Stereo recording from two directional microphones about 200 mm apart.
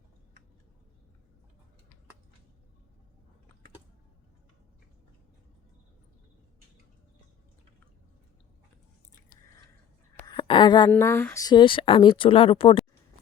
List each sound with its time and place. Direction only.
10.2 s a woman's voice: 25° left (ahead or behind)